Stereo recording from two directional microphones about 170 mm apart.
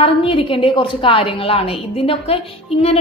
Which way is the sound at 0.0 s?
30° left (ahead or behind).